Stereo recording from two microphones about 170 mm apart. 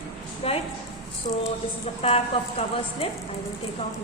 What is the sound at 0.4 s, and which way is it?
Speech, 35° left (ahead or behind).